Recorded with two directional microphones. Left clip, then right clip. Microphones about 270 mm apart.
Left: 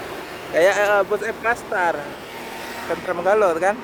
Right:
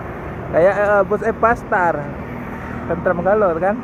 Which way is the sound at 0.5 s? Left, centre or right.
Left.